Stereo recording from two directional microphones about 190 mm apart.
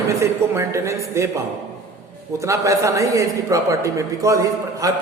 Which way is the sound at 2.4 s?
15° right (ahead or behind).